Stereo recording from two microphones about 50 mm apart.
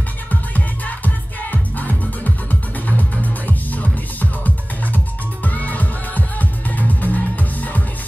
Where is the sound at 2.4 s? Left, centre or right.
Left.